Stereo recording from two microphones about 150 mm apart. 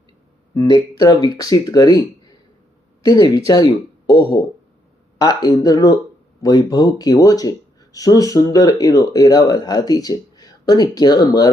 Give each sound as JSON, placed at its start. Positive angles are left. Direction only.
{"t": 0.5, "sound": "speech", "side_deg": 25}
{"t": 3.0, "sound": "speech", "side_deg": 25}
{"t": 5.1, "sound": "speech", "side_deg": 25}